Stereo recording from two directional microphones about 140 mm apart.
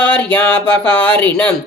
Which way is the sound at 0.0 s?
10° left (ahead or behind).